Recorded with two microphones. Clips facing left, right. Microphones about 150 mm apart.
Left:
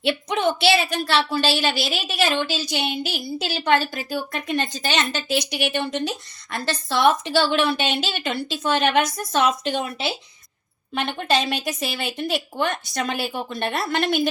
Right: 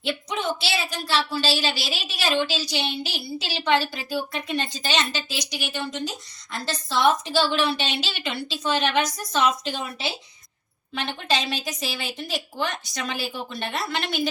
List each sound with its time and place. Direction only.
0.0 s a woman's voice: 65° left (ahead or behind)
10.9 s a woman's voice: 55° left (ahead or behind)